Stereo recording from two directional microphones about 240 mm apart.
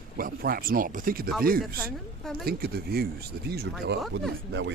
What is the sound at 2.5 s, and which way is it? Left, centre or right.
Speech, right.